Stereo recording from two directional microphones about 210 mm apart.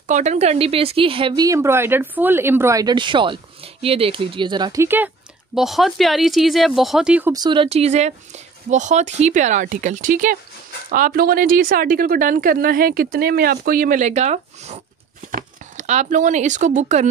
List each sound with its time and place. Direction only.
0.0 s speech: 35° right (ahead or behind); by 7.3 s 5° right (ahead or behind)
7.3 s speech: 20° right (ahead or behind)